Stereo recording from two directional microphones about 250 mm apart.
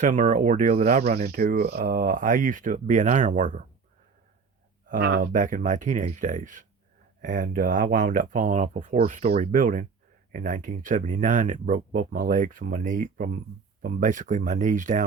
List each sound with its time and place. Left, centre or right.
0.0 s speech: right
4.9 s speech: right